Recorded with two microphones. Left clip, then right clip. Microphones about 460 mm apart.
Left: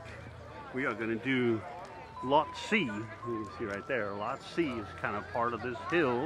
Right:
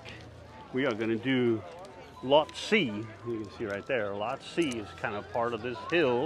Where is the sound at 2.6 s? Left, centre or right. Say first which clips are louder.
Right 4 dB; centre.